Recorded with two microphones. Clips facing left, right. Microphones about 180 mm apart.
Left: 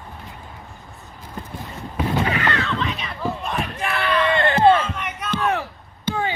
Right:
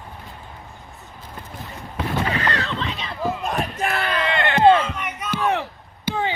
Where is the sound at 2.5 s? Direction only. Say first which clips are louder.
Left 2 dB; 35° right (ahead or behind).